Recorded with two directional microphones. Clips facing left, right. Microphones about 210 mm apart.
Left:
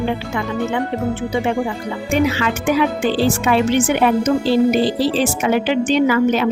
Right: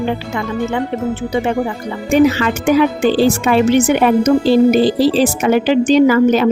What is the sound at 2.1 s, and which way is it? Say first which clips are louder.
A woman's voice: right 6 dB; 40° right (ahead or behind).